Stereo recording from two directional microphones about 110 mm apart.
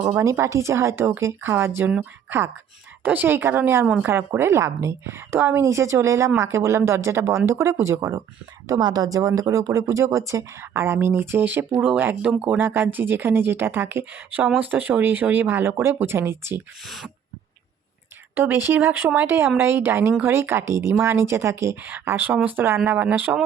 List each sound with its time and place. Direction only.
0.2 s a woman's voice: 30° right (ahead or behind)
3.0 s a woman's voice: 15° right (ahead or behind)
16.8 s speech: centre (ahead or behind)
18.3 s a woman's voice: 20° right (ahead or behind)